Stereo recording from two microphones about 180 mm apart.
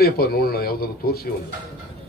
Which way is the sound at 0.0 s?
60° left (ahead or behind).